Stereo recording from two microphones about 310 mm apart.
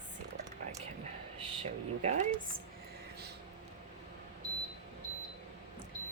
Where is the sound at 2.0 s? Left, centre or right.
Right.